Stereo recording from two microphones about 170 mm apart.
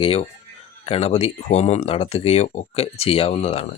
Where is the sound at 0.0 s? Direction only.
35° left (ahead or behind).